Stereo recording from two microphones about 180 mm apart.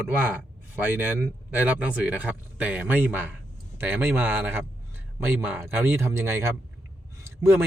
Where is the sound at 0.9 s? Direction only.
10° right (ahead or behind).